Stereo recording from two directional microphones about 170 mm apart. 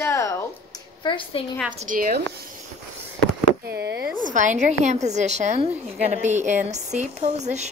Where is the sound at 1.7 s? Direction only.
50° right (ahead or behind).